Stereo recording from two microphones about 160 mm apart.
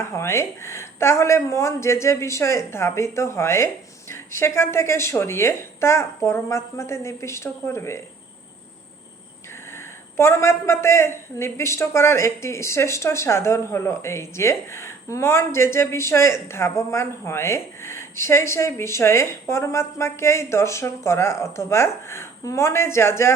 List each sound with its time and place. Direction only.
0.0 s a woman's voice: 15° left (ahead or behind)
9.7 s a woman's voice: 15° left (ahead or behind)